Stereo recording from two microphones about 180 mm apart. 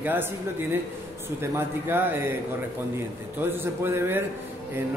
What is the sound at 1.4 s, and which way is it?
Speech, 15° right (ahead or behind).